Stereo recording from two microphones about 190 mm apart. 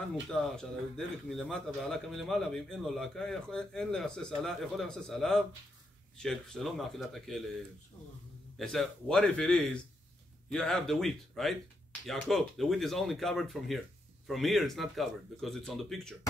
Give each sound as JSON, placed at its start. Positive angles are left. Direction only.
{"t": 0.1, "sound": "speech", "side_deg": 0}
{"t": 8.5, "sound": "speech", "side_deg": 0}